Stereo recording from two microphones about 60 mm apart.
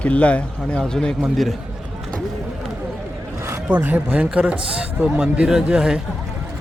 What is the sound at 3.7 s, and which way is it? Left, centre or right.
Speech, right.